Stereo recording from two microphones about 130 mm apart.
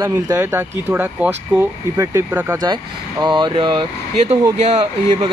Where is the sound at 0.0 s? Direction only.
20° right (ahead or behind); by 3.8 s 40° right (ahead or behind).